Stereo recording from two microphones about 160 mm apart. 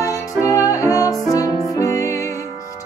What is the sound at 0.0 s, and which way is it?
Music, 20° left (ahead or behind).